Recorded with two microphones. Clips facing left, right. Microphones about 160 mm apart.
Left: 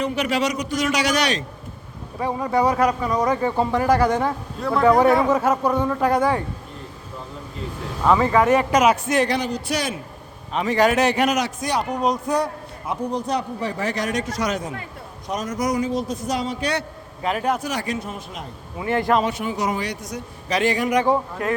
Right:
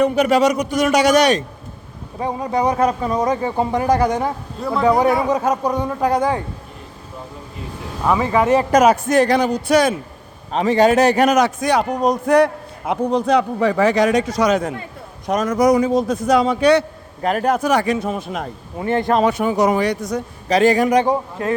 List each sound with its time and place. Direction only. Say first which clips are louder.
0.0 s a man's voice: right 8 dB; 45° right (ahead or behind)
2.1 s a man's voice: right 1 dB; 20° right (ahead or behind)
8.0 s a man's voice: even; 10° right (ahead or behind)
8.5 s a man's voice: right 4 dB; 40° right (ahead or behind)
10.5 s a man's voice: right 5 dB; 30° right (ahead or behind); by 11.9 s 55° right (ahead or behind)
11.9 s a man's voice: right 4 dB; 40° right (ahead or behind)
12.2 s a man's voice: right 8 dB; 70° right (ahead or behind)
15.3 s speech: right 9 dB; 60° right (ahead or behind)
15.9 s speech: right 8 dB; 50° right (ahead or behind); by 16.8 s 70° right (ahead or behind)
17.2 s speech: right 6 dB; 45° right (ahead or behind); by 18.4 s 65° right (ahead or behind)
18.9 s speech: right 3 dB; 25° right (ahead or behind)
19.1 s speech: right 5 dB; 50° right (ahead or behind)
20.5 s a man's voice: right 6 dB; 40° right (ahead or behind)
21.4 s speech: right 3 dB; 30° right (ahead or behind)